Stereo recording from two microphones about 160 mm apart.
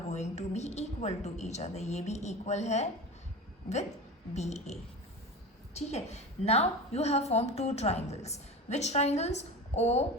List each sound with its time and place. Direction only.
0.1 s a woman's voice: 45° left (ahead or behind)
4.4 s a woman's voice: 45° left (ahead or behind)